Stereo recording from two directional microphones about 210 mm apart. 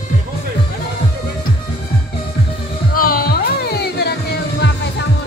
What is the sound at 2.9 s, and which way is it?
Music, 45° left (ahead or behind).